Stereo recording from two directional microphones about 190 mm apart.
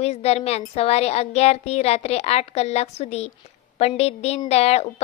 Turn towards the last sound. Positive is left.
turn(degrees=35)  # may be behind; listen again after turning